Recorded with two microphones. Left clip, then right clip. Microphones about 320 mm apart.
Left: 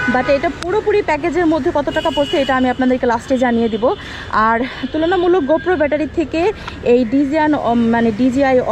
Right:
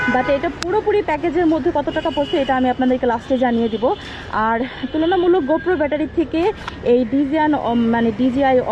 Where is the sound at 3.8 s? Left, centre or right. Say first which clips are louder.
Left 2 dB; centre.